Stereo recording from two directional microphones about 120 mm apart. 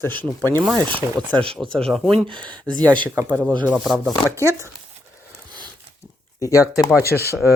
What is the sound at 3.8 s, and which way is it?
Speech, centre (ahead or behind).